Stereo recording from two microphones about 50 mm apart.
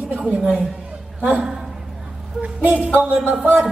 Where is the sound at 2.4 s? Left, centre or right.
Right.